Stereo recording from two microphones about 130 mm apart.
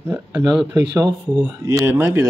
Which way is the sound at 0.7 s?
25° right (ahead or behind).